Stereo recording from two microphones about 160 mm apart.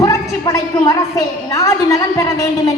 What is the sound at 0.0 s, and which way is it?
A woman's voice, 20° left (ahead or behind).